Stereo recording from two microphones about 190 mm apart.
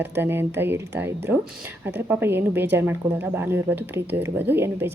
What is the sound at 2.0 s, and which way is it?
Speech, 10° right (ahead or behind).